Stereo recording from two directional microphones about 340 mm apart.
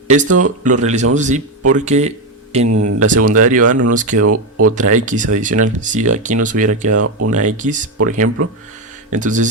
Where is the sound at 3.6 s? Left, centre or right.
Right.